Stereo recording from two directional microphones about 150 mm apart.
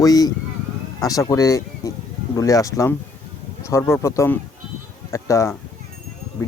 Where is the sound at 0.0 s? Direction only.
25° left (ahead or behind).